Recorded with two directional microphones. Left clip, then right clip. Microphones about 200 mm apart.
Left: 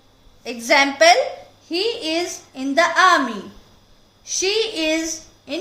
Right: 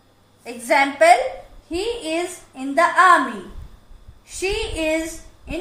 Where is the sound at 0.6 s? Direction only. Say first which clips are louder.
Left 1 dB; 50° left (ahead or behind).